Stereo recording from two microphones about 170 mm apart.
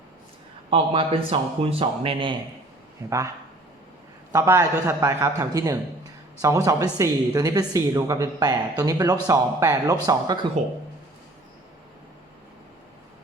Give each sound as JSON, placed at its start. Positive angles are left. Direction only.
{"t": 0.7, "sound": "speech", "side_deg": -35}
{"t": 3.1, "sound": "a woman's voice", "side_deg": -20}